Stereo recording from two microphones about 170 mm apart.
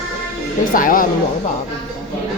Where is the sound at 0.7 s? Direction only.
55° left (ahead or behind).